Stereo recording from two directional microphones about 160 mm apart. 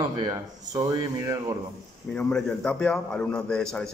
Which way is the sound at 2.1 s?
5° left (ahead or behind).